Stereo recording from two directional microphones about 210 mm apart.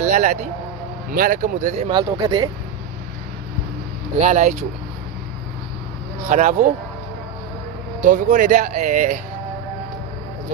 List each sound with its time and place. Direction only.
0.0 s speech: 35° right (ahead or behind)
1.9 s speech: 20° right (ahead or behind)
4.2 s speech: 35° right (ahead or behind)
6.2 s speech: 35° right (ahead or behind)
8.0 s speech: 40° right (ahead or behind)